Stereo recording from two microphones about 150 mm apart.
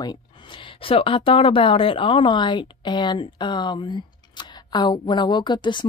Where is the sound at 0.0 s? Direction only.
30° left (ahead or behind).